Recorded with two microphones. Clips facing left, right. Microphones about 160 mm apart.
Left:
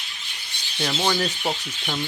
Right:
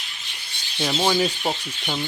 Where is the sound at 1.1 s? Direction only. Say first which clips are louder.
Right 3 dB; 10° right (ahead or behind).